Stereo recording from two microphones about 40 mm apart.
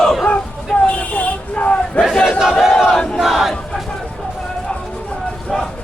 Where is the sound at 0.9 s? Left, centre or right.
Left.